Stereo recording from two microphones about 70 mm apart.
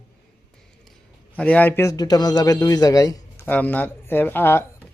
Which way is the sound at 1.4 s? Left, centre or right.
Left.